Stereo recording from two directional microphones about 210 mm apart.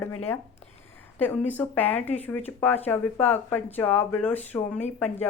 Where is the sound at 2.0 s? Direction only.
30° left (ahead or behind).